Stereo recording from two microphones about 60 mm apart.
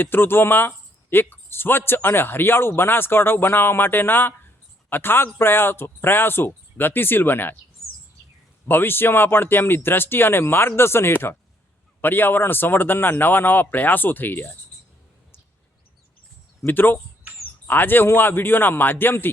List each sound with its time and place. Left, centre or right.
0.0 s speech: left
8.6 s speech: left
16.6 s speech: left